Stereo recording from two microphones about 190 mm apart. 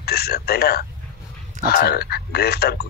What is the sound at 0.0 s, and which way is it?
A man's voice, 55° left (ahead or behind).